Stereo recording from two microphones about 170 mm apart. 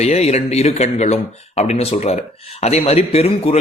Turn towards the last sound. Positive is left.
turn(degrees=35)  # may be behind; listen again after turning